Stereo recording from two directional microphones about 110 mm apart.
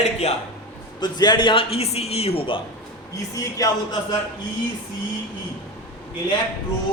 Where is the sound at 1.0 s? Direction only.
40° left (ahead or behind); by 2.6 s 55° left (ahead or behind).